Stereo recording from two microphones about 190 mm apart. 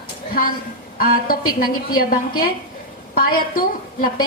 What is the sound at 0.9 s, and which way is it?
A woman's voice, 50° left (ahead or behind).